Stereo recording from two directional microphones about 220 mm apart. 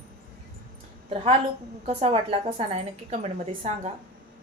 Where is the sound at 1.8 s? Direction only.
30° right (ahead or behind).